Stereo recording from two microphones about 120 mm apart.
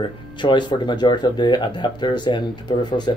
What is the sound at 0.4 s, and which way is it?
Speech, 40° left (ahead or behind).